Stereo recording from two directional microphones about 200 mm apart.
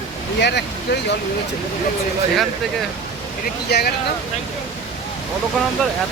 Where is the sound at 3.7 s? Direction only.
50° left (ahead or behind).